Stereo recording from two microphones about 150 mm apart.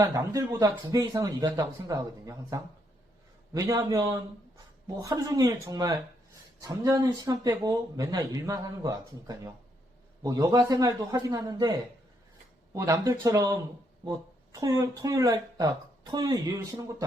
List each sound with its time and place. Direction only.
0.0 s speech: 25° right (ahead or behind)
12.7 s speech: 20° right (ahead or behind)